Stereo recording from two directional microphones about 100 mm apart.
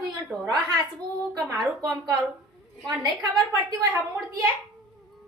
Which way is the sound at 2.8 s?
45° right (ahead or behind).